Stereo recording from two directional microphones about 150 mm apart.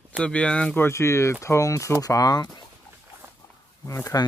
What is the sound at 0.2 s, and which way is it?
Speech, 10° left (ahead or behind).